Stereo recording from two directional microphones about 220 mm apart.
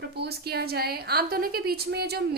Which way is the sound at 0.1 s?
45° right (ahead or behind).